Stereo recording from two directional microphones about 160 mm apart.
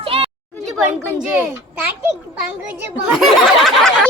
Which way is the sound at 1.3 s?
15° right (ahead or behind).